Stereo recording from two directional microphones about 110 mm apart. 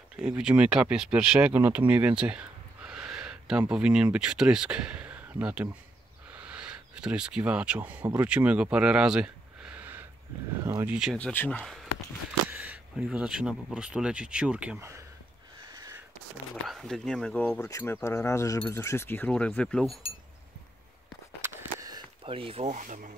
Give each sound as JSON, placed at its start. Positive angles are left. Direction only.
{"t": 0.2, "sound": "speech", "side_deg": -10}
{"t": 10.9, "sound": "speech", "side_deg": -5}
{"t": 11.1, "sound": "speech", "side_deg": 15}
{"t": 11.6, "sound": "speech", "side_deg": 0}
{"t": 12.4, "sound": "speech", "side_deg": -15}
{"t": 15.7, "sound": "a sound", "side_deg": -35}
{"t": 16.6, "sound": "speech", "side_deg": 0}
{"t": 17.6, "sound": "speech", "side_deg": 25}
{"t": 21.4, "sound": "a sound", "side_deg": -25}
{"t": 22.2, "sound": "speech", "side_deg": -55}